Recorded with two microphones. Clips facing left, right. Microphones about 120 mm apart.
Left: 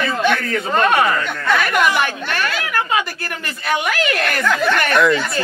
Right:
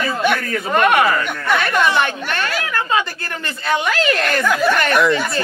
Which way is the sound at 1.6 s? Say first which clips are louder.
Right 1 dB; 30° right (ahead or behind).